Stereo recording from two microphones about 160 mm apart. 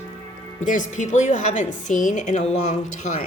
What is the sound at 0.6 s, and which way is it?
A woman's voice, 50° left (ahead or behind).